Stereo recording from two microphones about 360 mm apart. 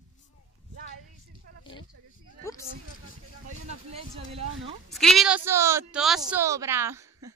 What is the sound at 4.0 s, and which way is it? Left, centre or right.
Speech, centre.